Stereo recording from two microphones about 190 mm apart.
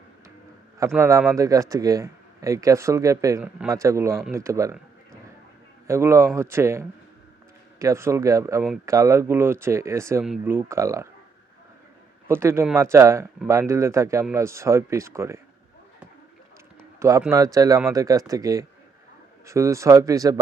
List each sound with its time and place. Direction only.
0.9 s speech: 15° right (ahead or behind)
5.9 s speech: 15° right (ahead or behind)
12.3 s speech: 15° right (ahead or behind)
17.0 s speech: 15° right (ahead or behind)